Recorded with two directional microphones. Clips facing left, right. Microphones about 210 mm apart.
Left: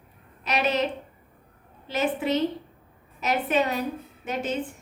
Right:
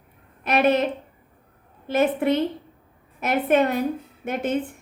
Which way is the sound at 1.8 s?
55° right (ahead or behind).